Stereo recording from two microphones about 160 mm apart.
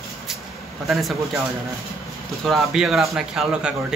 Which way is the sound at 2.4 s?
Centre (ahead or behind).